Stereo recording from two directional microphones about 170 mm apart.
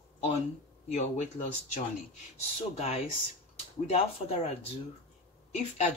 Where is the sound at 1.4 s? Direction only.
35° left (ahead or behind).